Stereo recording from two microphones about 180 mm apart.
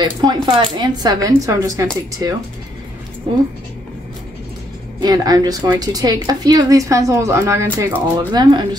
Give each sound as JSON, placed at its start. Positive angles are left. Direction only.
{"t": 0.0, "sound": "a woman's voice", "side_deg": -25}
{"t": 5.0, "sound": "a woman's voice", "side_deg": -20}